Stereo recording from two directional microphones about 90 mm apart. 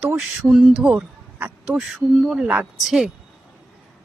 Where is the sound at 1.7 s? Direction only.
5° right (ahead or behind).